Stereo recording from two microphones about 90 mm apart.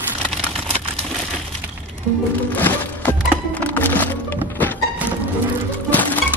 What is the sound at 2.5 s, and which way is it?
Music, 20° left (ahead or behind).